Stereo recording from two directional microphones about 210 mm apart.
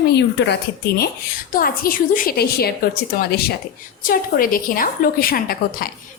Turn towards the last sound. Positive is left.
turn(degrees=45)  # may be behind; listen again after turning